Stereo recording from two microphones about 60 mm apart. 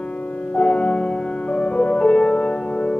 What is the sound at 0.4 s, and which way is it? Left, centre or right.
Music, centre.